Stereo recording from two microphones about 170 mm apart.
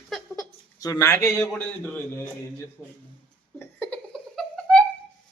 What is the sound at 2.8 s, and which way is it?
Speech, centre (ahead or behind).